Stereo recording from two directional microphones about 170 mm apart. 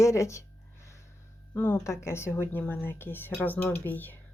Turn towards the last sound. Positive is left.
turn(degrees=10)  # may be behind; listen again after turning